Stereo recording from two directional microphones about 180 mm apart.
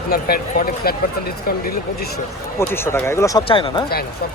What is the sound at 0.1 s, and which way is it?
Speech, 55° left (ahead or behind).